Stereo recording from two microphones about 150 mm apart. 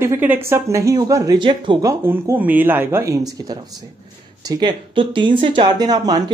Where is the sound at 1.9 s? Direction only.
15° right (ahead or behind).